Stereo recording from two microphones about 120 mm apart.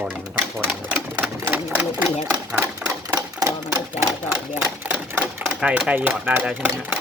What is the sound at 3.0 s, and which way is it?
Typewriter, 30° right (ahead or behind).